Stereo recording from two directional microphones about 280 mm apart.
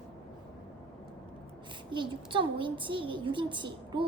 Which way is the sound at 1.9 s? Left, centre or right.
Centre.